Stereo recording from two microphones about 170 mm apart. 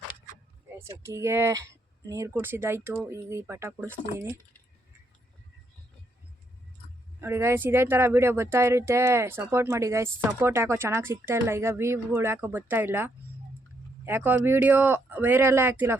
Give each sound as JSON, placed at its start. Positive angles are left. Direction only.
{"t": 0.8, "sound": "speech", "side_deg": -15}
{"t": 7.2, "sound": "speech", "side_deg": -15}